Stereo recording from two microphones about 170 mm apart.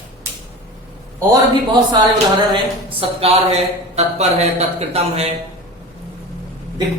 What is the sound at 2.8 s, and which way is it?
Speech, 35° right (ahead or behind).